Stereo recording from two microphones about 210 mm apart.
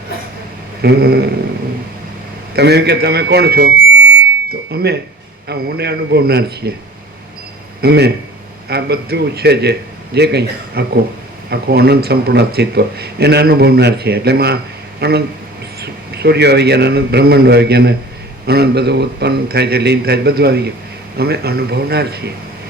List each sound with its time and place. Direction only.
0.8 s a man's voice: 50° right (ahead or behind)
2.6 s a man's voice: 50° right (ahead or behind)
4.7 s a man's voice: 50° right (ahead or behind)
7.8 s a man's voice: 50° right (ahead or behind)